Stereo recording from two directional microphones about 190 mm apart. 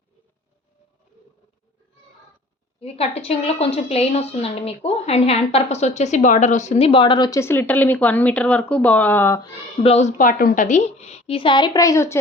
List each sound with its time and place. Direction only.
2.8 s a woman's voice: 30° left (ahead or behind); by 9.5 s 15° left (ahead or behind)
9.8 s a woman's voice: 35° left (ahead or behind); by 12.1 s 15° left (ahead or behind)